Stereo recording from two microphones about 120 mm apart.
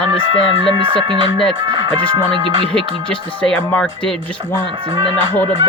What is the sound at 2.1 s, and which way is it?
Music, 40° right (ahead or behind).